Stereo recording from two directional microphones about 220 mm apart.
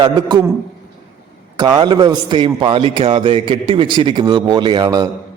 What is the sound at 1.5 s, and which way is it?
A man's voice, 20° right (ahead or behind).